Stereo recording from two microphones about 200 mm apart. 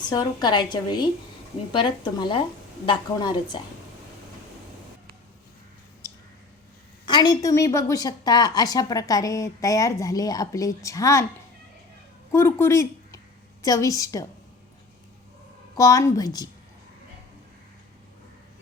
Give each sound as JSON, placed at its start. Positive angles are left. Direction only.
{"t": 0.0, "sound": "a woman's voice", "side_deg": 20}
{"t": 7.0, "sound": "a woman's voice", "side_deg": 20}
{"t": 12.3, "sound": "a woman's voice", "side_deg": 10}
{"t": 15.7, "sound": "a woman's voice", "side_deg": 15}